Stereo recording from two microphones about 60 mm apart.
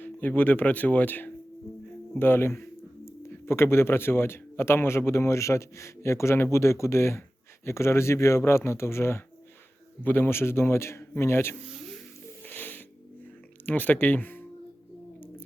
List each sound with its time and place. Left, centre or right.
0.0 s speech: left
10.0 s speech: left
11.7 s a sound: centre
12.5 s music: left
13.7 s speech: left